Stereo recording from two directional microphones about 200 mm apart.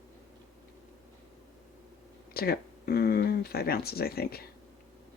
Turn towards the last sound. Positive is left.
turn(degrees=50)  # may be behind; listen again after turning